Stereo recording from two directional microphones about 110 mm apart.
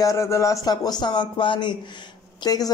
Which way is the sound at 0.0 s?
30° left (ahead or behind).